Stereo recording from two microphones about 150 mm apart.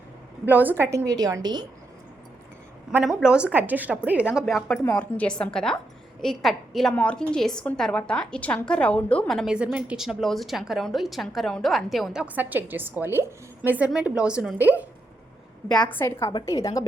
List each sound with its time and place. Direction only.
0.4 s a woman's voice: 10° right (ahead or behind); by 1.6 s 30° right (ahead or behind)
3.0 s a woman's voice: 5° right (ahead or behind)
4.9 s a woman's voice: 10° left (ahead or behind); by 14.8 s 10° right (ahead or behind)
15.9 s a woman's voice: 15° left (ahead or behind)